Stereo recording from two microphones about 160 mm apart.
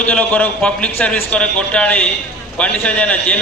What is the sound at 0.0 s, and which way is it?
A man's voice, 10° left (ahead or behind).